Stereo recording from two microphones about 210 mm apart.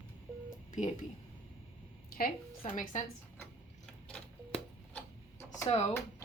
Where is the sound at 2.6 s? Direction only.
35° left (ahead or behind).